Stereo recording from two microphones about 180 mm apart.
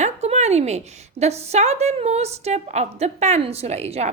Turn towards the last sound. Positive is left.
turn(degrees=-35)  # may be behind; listen again after turning